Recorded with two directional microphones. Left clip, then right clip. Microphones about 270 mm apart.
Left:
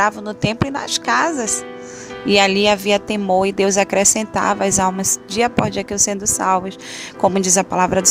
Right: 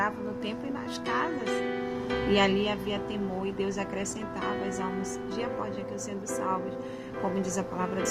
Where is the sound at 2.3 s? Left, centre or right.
Left.